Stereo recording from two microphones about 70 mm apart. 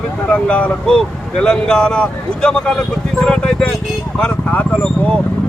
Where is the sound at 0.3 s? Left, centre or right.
Centre.